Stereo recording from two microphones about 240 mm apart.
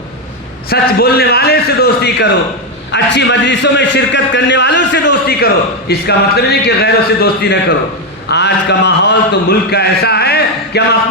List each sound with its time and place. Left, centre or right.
0.7 s a man's voice: left